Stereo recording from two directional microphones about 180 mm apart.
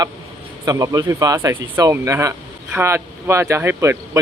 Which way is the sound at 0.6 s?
20° right (ahead or behind).